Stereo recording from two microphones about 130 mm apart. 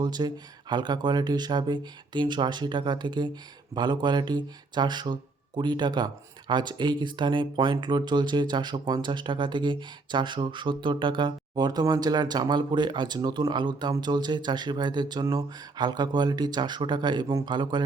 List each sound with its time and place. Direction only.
0.0 s speech: 35° right (ahead or behind)